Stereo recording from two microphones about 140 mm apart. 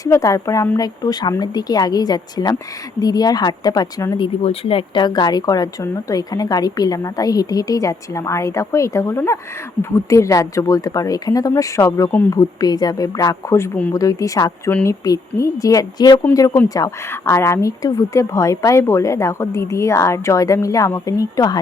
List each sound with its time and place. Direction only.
0.0 s speech: 25° left (ahead or behind)
4.4 s speech: 40° left (ahead or behind); by 21.6 s 25° left (ahead or behind)